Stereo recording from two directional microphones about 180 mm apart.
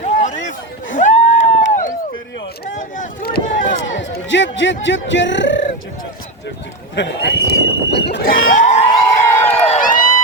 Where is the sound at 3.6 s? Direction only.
90° left.